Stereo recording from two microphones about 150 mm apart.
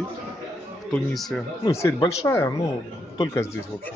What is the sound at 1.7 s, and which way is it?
Speech, 20° left (ahead or behind).